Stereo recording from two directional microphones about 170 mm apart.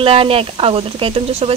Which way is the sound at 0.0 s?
30° right (ahead or behind).